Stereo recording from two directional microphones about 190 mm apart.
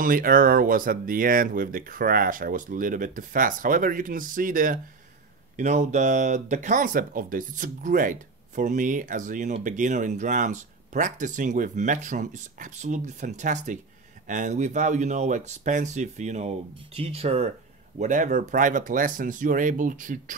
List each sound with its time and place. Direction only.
0.0 s speech: 50° right (ahead or behind)